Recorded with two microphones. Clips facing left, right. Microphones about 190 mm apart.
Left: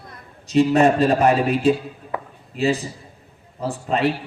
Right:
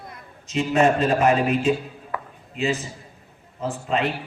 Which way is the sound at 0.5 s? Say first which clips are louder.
Left 4 dB; 35° left (ahead or behind).